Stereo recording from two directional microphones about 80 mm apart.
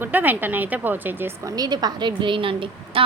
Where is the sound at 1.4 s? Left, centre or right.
Right.